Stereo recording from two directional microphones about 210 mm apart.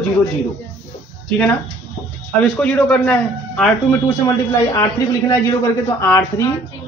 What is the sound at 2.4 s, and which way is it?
A man's voice, 5° left (ahead or behind).